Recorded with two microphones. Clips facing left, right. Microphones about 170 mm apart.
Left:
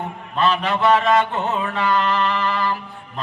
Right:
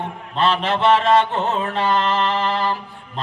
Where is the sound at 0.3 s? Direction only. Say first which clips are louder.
Even; 30° right (ahead or behind).